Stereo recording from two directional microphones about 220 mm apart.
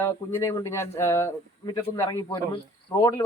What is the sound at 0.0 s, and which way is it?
Speech, 10° left (ahead or behind).